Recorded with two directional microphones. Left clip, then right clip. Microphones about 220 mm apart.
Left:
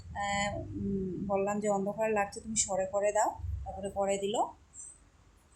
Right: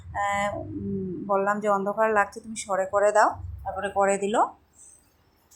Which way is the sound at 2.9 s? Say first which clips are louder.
Right 11 dB; 20° right (ahead or behind).